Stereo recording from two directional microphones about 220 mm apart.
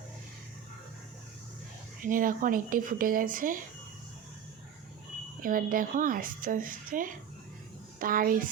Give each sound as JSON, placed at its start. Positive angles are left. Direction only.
{"t": 2.0, "sound": "a woman's voice", "side_deg": -40}
{"t": 5.4, "sound": "a woman's voice", "side_deg": -40}